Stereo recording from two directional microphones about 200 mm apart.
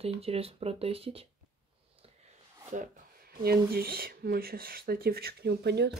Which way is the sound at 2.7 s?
45° right (ahead or behind).